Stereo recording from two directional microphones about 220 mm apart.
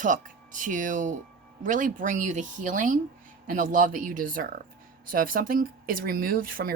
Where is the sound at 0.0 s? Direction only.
35° right (ahead or behind).